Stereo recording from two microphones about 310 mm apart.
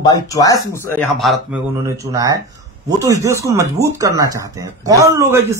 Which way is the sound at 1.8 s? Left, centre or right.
Centre.